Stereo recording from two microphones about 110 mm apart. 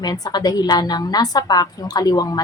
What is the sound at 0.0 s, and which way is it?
A woman's voice, 35° left (ahead or behind).